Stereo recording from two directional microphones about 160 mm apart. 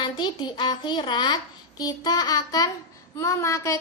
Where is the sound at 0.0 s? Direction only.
30° left (ahead or behind).